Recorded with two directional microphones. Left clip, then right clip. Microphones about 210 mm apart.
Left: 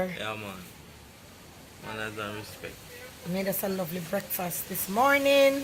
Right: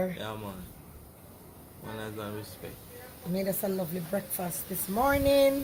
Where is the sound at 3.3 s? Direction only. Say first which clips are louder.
Left 1 dB; 10° left (ahead or behind).